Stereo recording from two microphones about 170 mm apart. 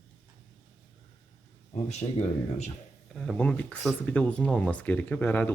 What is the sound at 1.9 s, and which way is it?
Speech, 40° left (ahead or behind).